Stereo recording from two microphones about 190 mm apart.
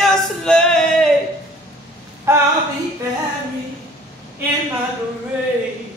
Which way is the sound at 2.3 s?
15° right (ahead or behind).